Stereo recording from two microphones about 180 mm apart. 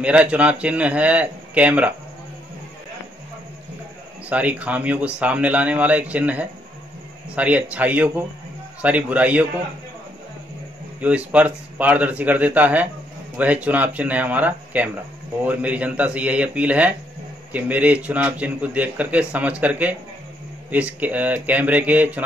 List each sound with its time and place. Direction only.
0.0 s a man's voice: 5° right (ahead or behind)
4.3 s a man's voice: 10° right (ahead or behind)
11.0 s a man's voice: 10° right (ahead or behind)